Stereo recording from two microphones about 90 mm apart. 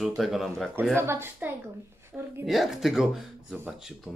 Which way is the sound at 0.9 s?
25° right (ahead or behind).